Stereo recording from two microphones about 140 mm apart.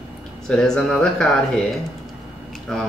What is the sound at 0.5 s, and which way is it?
Speech, 5° left (ahead or behind).